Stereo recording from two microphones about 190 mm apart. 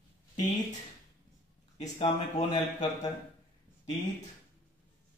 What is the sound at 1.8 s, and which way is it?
Speech, 35° left (ahead or behind).